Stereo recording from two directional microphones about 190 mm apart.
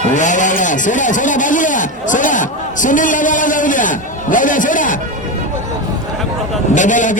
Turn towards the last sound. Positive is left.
turn(degrees=40)  # may be behind; listen again after turning